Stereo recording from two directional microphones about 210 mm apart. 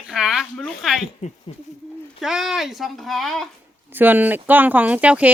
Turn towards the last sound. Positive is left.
turn(degrees=-5)  # may be behind; listen again after turning